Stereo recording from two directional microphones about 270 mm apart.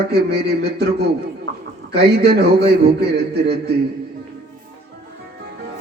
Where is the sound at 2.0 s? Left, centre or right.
Right.